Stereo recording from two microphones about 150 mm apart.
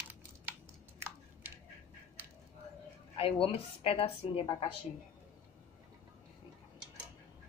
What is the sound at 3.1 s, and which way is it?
A woman's voice, 40° left (ahead or behind).